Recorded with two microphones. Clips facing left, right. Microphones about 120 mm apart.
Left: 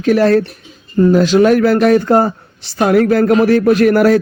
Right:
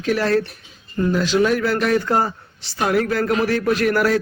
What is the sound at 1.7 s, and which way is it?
A man's voice, 50° left (ahead or behind).